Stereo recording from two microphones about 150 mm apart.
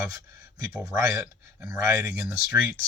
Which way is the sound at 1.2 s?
10° right (ahead or behind).